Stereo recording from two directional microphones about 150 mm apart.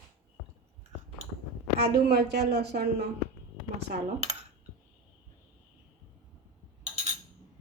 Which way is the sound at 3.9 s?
65° right (ahead or behind).